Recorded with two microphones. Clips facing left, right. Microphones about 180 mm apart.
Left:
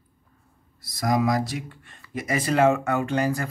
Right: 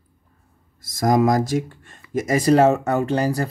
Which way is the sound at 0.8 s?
45° right (ahead or behind).